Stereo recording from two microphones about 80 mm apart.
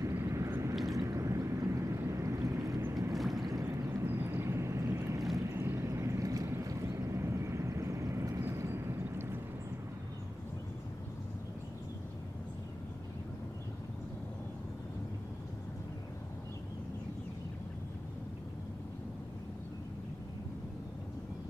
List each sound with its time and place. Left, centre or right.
0.0 s vehicle: right
0.8 s boat: right
3.2 s boat: centre
4.0 s boat: right
5.5 s vehicle: right